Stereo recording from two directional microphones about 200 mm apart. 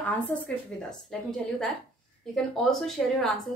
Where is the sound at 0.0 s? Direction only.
5° left (ahead or behind).